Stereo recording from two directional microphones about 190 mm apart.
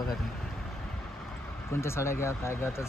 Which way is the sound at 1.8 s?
15° left (ahead or behind).